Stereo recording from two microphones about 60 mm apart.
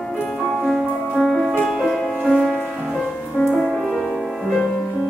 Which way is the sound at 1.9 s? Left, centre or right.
Centre.